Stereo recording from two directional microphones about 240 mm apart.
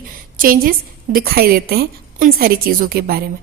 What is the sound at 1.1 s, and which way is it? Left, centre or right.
A woman's voice, right.